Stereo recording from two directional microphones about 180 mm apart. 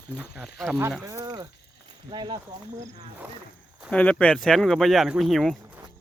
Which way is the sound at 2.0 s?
25° right (ahead or behind).